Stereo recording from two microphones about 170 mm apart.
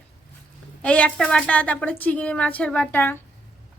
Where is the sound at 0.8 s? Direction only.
5° left (ahead or behind).